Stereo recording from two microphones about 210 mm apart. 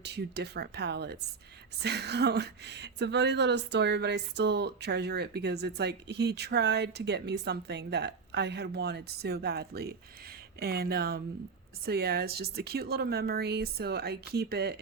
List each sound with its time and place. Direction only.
0.0 s speech: 50° right (ahead or behind)